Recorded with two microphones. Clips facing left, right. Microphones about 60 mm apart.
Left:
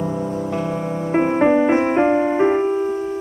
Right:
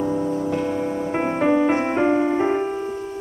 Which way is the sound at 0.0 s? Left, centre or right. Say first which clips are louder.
Right 1 dB; centre.